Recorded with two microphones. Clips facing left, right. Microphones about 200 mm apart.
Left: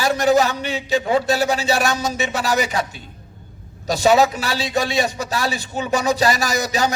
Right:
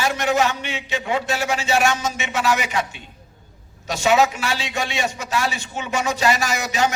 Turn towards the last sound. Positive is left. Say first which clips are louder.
# left 1 dB
turn(degrees=35)  # may be behind; listen again after turning